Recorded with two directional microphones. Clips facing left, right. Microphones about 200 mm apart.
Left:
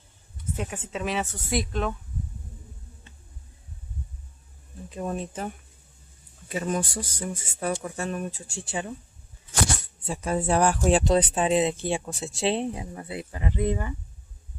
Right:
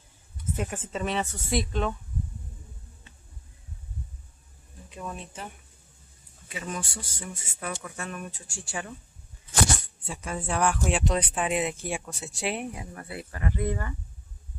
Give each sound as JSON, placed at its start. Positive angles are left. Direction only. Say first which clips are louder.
{"t": 0.6, "sound": "speech", "louder": "even", "side_deg": 0}
{"t": 4.9, "sound": "speech", "louder": "left 7 dB", "side_deg": 40}
{"t": 6.5, "sound": "speech", "louder": "left 8 dB", "side_deg": 40}
{"t": 10.0, "sound": "speech", "louder": "left 7 dB", "side_deg": 40}